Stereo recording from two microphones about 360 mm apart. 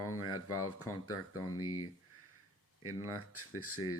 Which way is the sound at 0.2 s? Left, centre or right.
Left.